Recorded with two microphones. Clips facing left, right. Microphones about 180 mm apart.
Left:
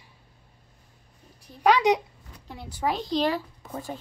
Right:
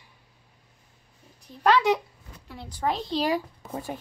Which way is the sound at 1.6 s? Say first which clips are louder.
Left 1 dB; 15° left (ahead or behind).